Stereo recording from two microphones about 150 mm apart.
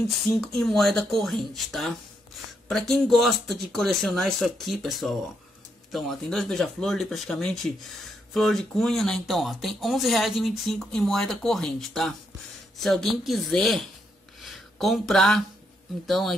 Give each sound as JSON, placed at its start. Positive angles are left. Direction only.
{"t": 0.3, "sound": "speech", "side_deg": 0}
{"t": 14.4, "sound": "a sound", "side_deg": 0}
{"t": 16.1, "sound": "speech", "side_deg": 0}